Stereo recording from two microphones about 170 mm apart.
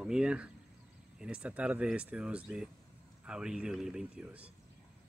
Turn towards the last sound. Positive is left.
turn(degrees=-5)  # may be behind; listen again after turning